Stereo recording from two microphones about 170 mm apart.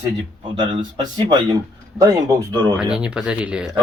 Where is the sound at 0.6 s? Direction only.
25° right (ahead or behind).